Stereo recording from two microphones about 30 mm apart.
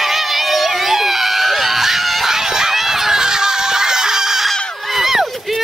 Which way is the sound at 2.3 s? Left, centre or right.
Centre.